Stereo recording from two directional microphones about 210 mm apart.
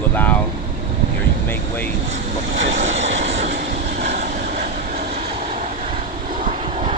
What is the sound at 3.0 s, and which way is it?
Vehicle, 60° right (ahead or behind).